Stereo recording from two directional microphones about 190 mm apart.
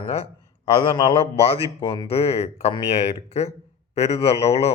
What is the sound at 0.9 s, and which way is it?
A man's voice, 25° left (ahead or behind).